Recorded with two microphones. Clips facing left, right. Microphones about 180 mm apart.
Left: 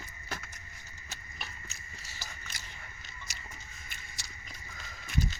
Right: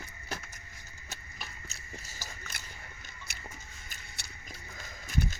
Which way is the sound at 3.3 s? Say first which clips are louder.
Right 2 dB; 60° right (ahead or behind).